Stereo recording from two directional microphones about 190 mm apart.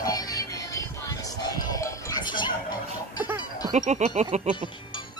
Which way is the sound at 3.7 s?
35° right (ahead or behind).